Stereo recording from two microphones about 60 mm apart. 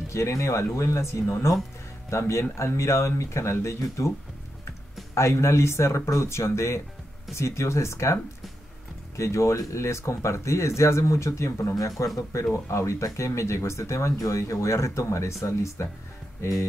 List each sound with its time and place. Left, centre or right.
0.1 s speech: left
5.1 s speech: left
11.7 s a man's voice: left
12.6 s speech: left
16.3 s music: left